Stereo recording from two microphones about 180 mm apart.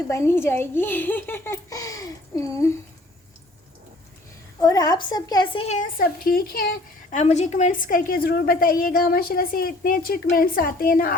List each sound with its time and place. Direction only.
0.1 s a child's voice: 15° left (ahead or behind)
4.6 s a woman's voice: 20° left (ahead or behind)
5.6 s a woman's voice: 45° left (ahead or behind)
7.2 s a woman's voice: 40° left (ahead or behind)